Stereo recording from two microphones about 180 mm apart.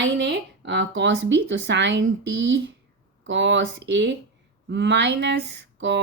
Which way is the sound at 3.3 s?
90° right.